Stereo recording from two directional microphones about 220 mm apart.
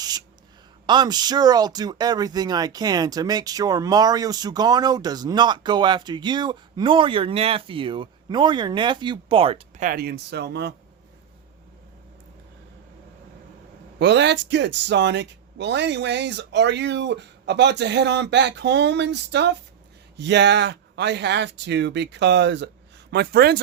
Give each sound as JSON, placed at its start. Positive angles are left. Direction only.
{"t": 0.0, "sound": "a sound", "side_deg": -20}
{"t": 0.9, "sound": "speech", "side_deg": -20}
{"t": 9.8, "sound": "speech", "side_deg": -45}
{"t": 14.0, "sound": "speech", "side_deg": -50}